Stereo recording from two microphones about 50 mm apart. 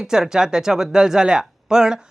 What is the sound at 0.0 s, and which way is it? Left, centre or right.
Speech, centre.